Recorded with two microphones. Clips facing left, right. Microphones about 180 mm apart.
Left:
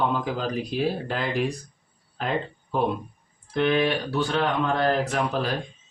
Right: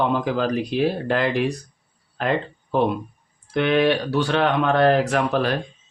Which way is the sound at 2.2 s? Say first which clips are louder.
Right 4 dB; 70° right (ahead or behind).